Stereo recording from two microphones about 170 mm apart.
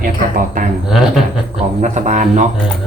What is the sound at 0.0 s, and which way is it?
Speech, 50° right (ahead or behind).